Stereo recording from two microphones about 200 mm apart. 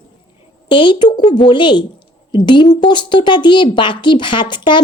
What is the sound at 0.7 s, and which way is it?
A woman's voice, 25° left (ahead or behind).